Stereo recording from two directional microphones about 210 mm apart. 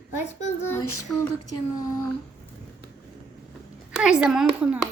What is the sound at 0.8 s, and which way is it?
Female singing, 90° left.